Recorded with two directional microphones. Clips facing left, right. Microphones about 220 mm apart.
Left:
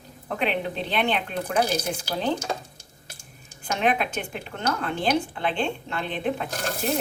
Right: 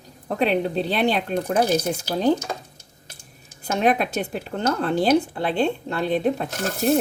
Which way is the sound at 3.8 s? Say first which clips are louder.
Right 4 dB; 40° right (ahead or behind).